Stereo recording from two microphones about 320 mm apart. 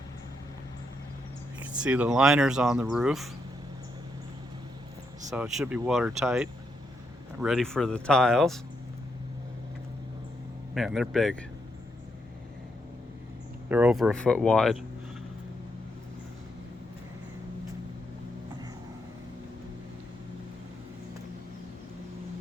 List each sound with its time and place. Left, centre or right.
1.7 s speech: centre
5.3 s speech: centre
10.8 s speech: centre
13.7 s speech: centre